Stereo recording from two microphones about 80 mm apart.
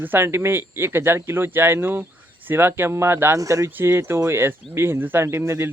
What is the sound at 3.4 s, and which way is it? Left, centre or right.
Speech, right.